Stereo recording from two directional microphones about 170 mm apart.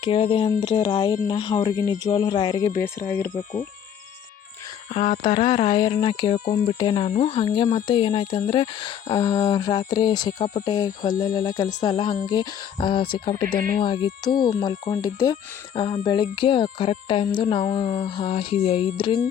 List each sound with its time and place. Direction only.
0.0 s speech: 30° left (ahead or behind); by 3.2 s 15° left (ahead or behind)
3.2 s speech: 50° left (ahead or behind)
4.9 s speech: 45° left (ahead or behind)
5.5 s speech: 25° left (ahead or behind)
6.4 s speech: 55° left (ahead or behind)
6.7 s speech: 30° left (ahead or behind)
10.3 s speech: 50° left (ahead or behind)
10.7 s speech: 20° left (ahead or behind)